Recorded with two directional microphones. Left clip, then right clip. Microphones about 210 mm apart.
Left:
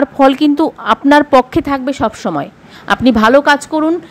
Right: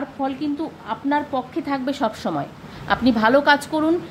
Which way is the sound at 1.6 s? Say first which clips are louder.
Left 8 dB; 35° left (ahead or behind).